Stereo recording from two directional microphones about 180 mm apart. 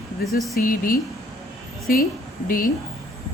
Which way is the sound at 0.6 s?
50° left (ahead or behind).